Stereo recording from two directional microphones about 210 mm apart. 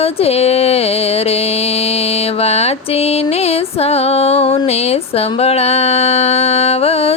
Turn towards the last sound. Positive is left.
turn(degrees=30)  # may be behind; listen again after turning